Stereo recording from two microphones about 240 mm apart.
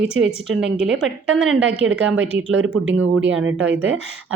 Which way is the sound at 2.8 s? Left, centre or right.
Right.